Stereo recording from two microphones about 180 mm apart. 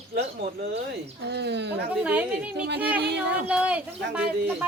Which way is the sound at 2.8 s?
10° right (ahead or behind).